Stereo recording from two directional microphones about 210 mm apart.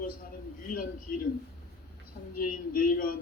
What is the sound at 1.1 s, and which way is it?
Speech, 45° left (ahead or behind).